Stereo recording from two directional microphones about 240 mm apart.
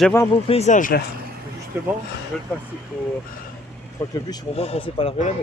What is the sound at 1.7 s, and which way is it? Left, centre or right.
Speech, centre.